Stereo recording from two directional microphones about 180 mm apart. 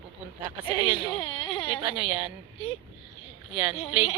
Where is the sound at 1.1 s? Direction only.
30° left (ahead or behind).